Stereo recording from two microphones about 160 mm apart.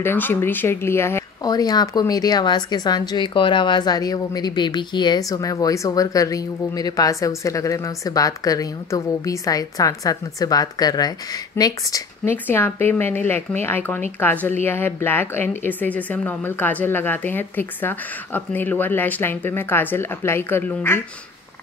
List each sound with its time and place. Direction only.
0.0 s a woman's voice: 15° left (ahead or behind)